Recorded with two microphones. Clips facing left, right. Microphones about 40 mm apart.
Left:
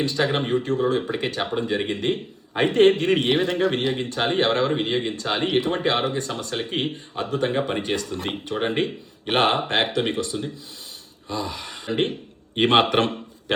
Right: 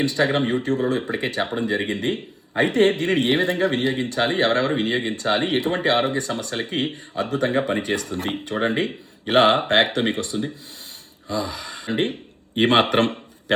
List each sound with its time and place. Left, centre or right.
0.0 s speech: right